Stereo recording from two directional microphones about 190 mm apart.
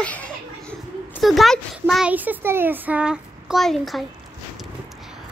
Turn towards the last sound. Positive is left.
turn(degrees=0)  # may be behind; listen again after turning